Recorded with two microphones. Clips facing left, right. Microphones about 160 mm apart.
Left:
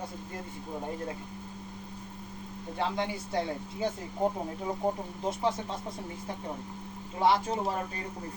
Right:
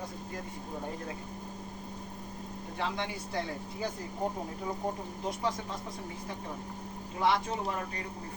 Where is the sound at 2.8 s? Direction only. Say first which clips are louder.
Left 4 dB; 25° left (ahead or behind).